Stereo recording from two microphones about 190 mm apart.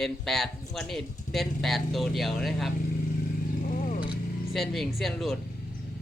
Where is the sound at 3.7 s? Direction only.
45° left (ahead or behind).